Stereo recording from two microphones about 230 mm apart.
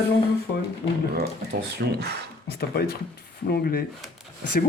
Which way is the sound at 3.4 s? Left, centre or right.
Left.